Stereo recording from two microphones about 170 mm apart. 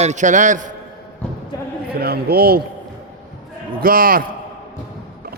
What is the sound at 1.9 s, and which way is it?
Speech, 65° right (ahead or behind).